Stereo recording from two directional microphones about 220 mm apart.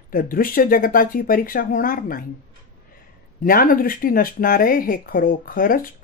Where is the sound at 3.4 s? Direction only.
40° left (ahead or behind).